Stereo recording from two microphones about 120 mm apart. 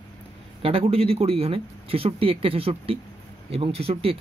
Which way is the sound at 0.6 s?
55° right (ahead or behind).